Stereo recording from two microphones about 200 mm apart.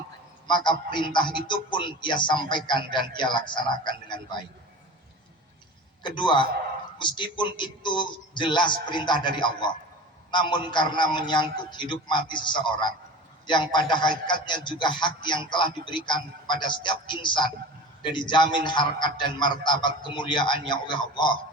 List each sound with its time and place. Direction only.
0.4 s a man's voice: 20° left (ahead or behind)
6.0 s a man's voice: 25° left (ahead or behind)